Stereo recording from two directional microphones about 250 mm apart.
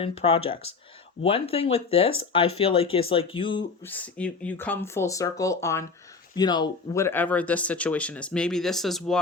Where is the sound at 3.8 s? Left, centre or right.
Centre.